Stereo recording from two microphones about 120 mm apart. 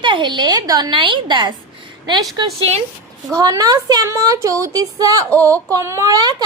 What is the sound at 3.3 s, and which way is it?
A woman's voice, 30° right (ahead or behind).